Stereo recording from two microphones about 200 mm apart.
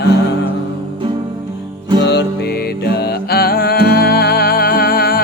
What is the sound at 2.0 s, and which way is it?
Music, 55° left (ahead or behind).